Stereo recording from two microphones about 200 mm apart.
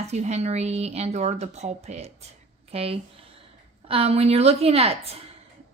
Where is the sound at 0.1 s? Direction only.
35° right (ahead or behind).